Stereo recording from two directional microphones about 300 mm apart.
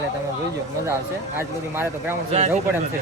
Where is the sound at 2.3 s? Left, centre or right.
Centre.